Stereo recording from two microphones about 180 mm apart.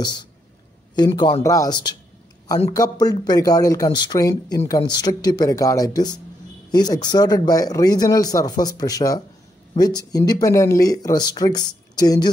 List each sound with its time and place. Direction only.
0.0 s speech: 25° left (ahead or behind)